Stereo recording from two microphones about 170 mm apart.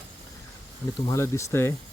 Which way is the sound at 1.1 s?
15° left (ahead or behind).